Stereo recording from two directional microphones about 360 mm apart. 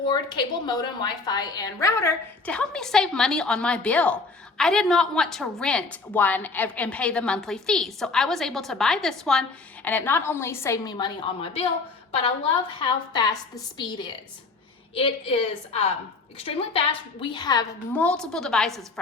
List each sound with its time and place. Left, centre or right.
0.0 s a woman's voice: centre
12.8 s a woman's voice: centre